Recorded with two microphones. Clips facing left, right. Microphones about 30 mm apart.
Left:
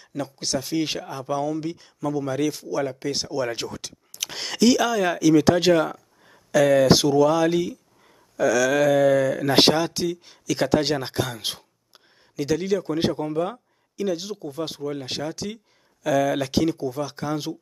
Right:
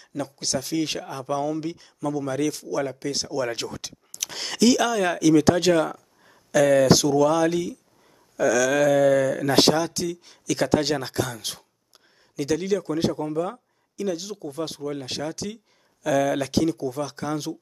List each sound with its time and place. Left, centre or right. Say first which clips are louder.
0.0 s speech: even; centre
3.4 s speech: even; centre
6.9 s speech: left 1 dB; left
9.6 s speech: left 1 dB; left
10.2 s speech: left 1 dB; centre
13.0 s speech: left 1 dB; left
14.0 s speech: left 2 dB; centre